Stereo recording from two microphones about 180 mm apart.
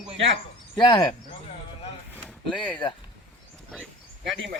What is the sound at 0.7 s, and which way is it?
Speech, 25° left (ahead or behind).